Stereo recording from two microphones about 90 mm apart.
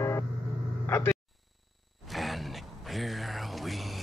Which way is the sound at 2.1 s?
Centre (ahead or behind).